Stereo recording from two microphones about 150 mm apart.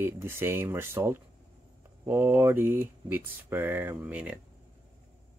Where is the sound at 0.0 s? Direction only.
15° right (ahead or behind).